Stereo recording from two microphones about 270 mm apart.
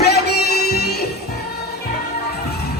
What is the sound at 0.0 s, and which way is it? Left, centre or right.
Music, left.